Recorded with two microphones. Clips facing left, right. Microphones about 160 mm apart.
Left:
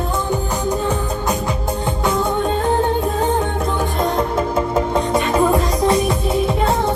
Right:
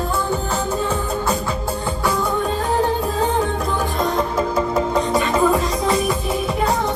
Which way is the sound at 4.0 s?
25° left (ahead or behind).